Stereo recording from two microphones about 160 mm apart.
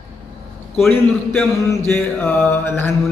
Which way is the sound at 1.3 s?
15° left (ahead or behind).